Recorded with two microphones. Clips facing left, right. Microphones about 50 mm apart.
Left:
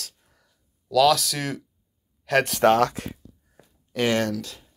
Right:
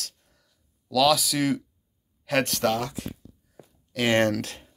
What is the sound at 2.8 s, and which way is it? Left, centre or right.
Speech, left.